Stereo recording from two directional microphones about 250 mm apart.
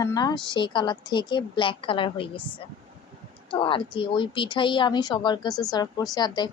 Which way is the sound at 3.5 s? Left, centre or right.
Left.